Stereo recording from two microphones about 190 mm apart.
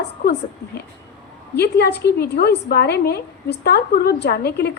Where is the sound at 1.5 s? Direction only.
60° left (ahead or behind).